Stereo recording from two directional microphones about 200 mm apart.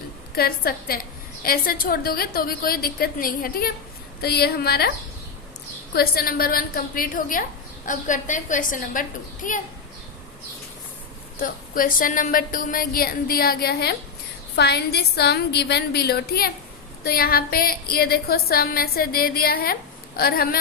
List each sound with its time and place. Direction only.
0.3 s a woman's voice: 50° left (ahead or behind)
5.9 s a woman's voice: 50° left (ahead or behind)
11.3 s a woman's voice: 45° left (ahead or behind)